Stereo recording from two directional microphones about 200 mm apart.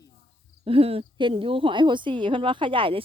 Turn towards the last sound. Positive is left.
turn(degrees=-25)  # may be behind; listen again after turning